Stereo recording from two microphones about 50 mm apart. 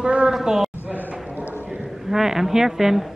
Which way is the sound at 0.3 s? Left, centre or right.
Centre.